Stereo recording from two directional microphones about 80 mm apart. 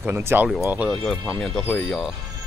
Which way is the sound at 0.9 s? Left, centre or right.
Centre.